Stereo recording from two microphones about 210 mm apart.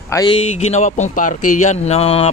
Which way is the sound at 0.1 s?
15° left (ahead or behind).